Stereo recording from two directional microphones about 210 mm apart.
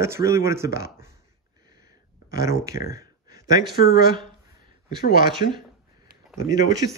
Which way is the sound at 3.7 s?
45° left (ahead or behind).